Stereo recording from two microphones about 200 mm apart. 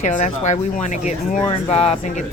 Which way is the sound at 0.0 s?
35° left (ahead or behind).